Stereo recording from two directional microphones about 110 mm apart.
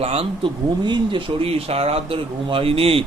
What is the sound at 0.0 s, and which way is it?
Speech, 60° right (ahead or behind).